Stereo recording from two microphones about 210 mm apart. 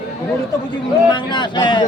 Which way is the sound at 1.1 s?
20° left (ahead or behind).